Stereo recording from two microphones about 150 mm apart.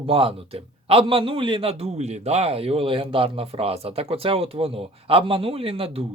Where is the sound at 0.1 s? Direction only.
40° right (ahead or behind).